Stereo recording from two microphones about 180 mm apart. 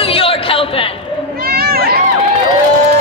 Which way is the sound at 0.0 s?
30° left (ahead or behind).